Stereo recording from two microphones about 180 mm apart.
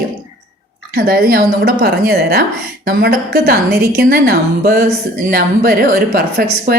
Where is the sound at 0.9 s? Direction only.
55° right (ahead or behind).